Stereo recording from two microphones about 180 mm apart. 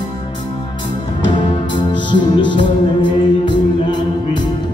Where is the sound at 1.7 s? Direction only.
25° left (ahead or behind).